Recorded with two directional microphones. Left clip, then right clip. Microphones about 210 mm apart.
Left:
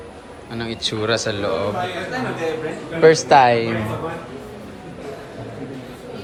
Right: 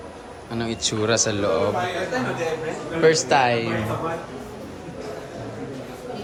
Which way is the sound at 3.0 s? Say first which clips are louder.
Left 6 dB; 5° right (ahead or behind).